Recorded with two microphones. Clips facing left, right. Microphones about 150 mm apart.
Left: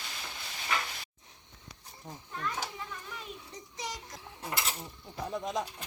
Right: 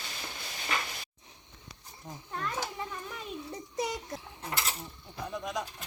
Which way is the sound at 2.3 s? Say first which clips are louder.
Right 2 dB; 45° right (ahead or behind).